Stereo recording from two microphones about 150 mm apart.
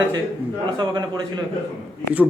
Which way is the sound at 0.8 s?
30° right (ahead or behind).